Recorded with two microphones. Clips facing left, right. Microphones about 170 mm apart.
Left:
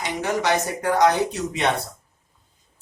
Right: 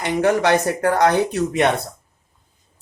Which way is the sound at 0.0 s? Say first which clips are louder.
Right 7 dB; 55° right (ahead or behind).